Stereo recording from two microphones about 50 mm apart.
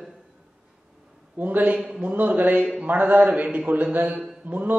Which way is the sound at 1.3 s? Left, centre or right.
Right.